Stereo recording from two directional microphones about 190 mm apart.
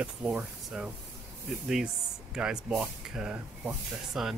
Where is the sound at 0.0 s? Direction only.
5° right (ahead or behind).